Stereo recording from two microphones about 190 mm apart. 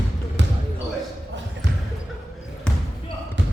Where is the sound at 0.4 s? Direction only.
70° right (ahead or behind).